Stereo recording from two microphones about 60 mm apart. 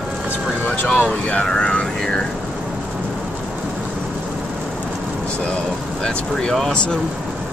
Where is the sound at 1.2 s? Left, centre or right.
Left.